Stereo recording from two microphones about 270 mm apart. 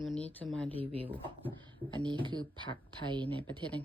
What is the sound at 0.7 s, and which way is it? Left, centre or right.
Speech, centre.